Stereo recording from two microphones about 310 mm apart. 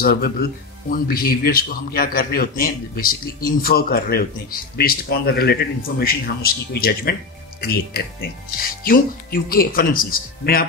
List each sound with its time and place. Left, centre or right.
0.0 s speech: left